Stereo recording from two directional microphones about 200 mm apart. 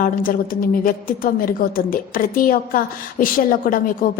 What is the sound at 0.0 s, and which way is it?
A woman's voice, 45° left (ahead or behind).